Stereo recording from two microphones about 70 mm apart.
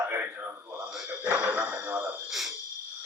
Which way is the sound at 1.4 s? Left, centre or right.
Right.